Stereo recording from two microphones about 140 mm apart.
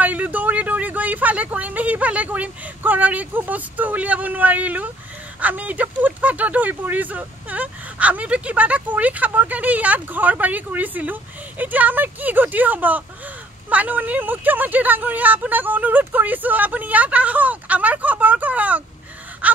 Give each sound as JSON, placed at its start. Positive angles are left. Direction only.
{"t": 0.0, "sound": "speech", "side_deg": -10}
{"t": 19.4, "sound": "gasp", "side_deg": -10}